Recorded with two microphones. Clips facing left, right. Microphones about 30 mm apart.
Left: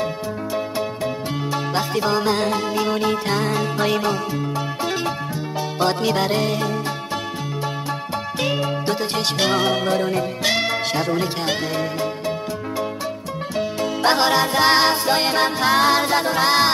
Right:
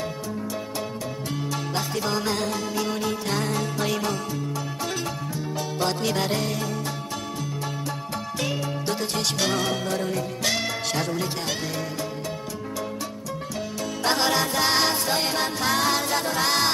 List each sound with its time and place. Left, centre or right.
1.5 s music: left
5.8 s music: left
6.4 s music: left
8.4 s music: left
13.6 s music: left